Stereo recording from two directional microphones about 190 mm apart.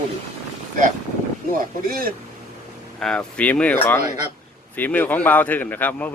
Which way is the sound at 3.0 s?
5° left (ahead or behind).